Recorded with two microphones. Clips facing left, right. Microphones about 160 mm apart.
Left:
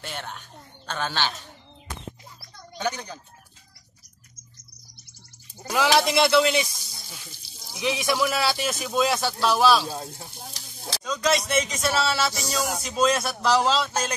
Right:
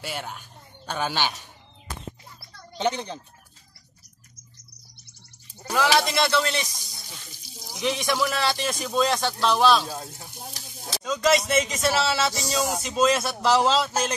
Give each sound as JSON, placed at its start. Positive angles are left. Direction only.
{"t": 0.0, "sound": "speech", "side_deg": -10}
{"t": 2.8, "sound": "speech", "side_deg": -25}
{"t": 5.9, "sound": "speech", "side_deg": 10}
{"t": 11.1, "sound": "speech", "side_deg": 0}